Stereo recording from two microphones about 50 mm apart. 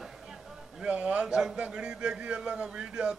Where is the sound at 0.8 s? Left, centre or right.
Right.